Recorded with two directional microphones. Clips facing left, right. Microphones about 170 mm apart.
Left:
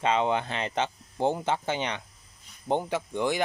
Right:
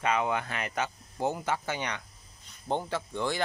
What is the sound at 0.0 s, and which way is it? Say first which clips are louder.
Speech: left 3 dB; 25° left (ahead or behind).